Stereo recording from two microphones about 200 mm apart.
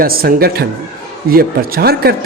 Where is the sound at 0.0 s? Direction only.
50° right (ahead or behind).